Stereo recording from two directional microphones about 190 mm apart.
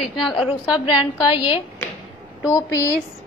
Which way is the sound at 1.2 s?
25° left (ahead or behind).